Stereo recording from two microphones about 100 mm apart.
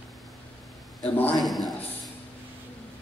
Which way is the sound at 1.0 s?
15° left (ahead or behind).